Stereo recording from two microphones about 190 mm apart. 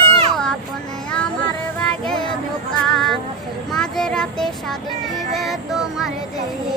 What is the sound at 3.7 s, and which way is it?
Child singing, 5° left (ahead or behind).